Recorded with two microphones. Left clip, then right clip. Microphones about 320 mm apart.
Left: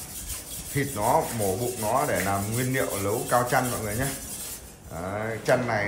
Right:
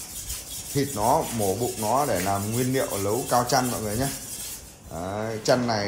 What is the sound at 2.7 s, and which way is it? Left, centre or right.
Speech, centre.